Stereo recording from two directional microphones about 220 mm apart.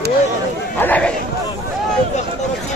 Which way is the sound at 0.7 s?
5° left (ahead or behind).